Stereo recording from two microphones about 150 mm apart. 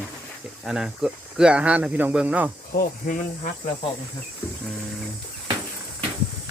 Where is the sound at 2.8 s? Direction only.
65° left (ahead or behind).